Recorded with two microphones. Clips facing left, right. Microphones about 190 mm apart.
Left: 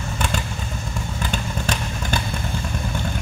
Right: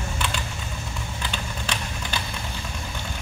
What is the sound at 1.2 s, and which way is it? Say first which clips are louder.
Vehicle: left 7 dB; 45° left (ahead or behind).